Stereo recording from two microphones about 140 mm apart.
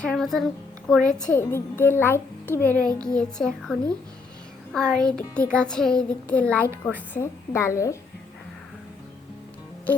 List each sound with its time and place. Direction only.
0.0 s a woman's voice: 5° left (ahead or behind)
1.2 s a woman's voice: 15° left (ahead or behind)
9.9 s music: 10° left (ahead or behind)